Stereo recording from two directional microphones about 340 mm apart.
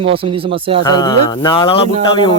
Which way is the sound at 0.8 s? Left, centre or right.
Centre.